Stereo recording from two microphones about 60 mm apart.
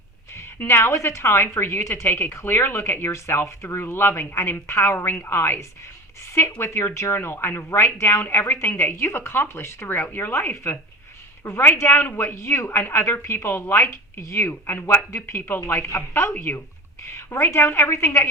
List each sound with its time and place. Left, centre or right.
0.3 s speech: left
3.1 s speech: left
4.9 s a woman's voice: left